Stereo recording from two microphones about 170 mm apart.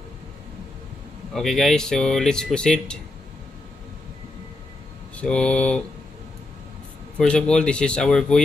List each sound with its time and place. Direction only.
1.3 s speech: centre (ahead or behind)
5.1 s speech: 5° left (ahead or behind)
7.2 s speech: 5° left (ahead or behind)